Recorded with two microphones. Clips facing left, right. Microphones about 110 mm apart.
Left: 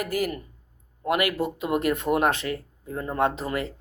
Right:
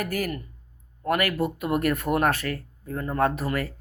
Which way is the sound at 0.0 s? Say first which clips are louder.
Left 1 dB; 20° left (ahead or behind).